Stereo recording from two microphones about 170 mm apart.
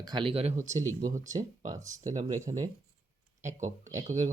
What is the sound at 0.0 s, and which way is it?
Speech, 25° right (ahead or behind).